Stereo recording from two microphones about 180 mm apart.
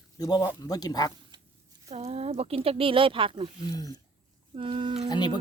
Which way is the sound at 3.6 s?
20° left (ahead or behind).